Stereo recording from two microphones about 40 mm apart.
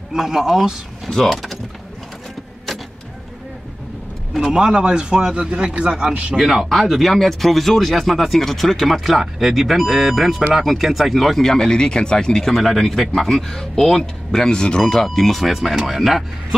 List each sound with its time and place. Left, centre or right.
0.1 s speech: centre
1.0 s speech: centre
4.5 s speech: centre
6.3 s speech: centre
11.7 s speech: left
12.5 s speech: centre